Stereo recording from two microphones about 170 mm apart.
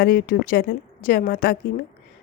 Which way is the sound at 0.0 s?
65° left (ahead or behind).